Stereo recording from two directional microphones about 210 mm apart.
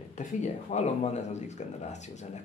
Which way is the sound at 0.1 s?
35° left (ahead or behind).